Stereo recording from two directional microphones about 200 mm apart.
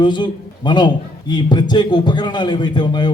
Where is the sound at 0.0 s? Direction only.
20° left (ahead or behind).